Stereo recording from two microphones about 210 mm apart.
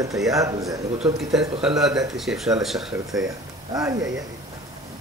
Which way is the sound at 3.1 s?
15° right (ahead or behind).